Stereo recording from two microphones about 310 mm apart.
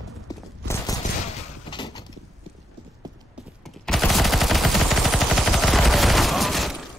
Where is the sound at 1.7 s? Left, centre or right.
Centre.